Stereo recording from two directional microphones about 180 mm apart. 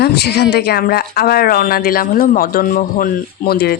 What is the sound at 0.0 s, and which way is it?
Speech, 65° left (ahead or behind).